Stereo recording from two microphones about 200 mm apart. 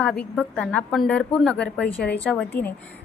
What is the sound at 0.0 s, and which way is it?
A woman's voice, 5° left (ahead or behind).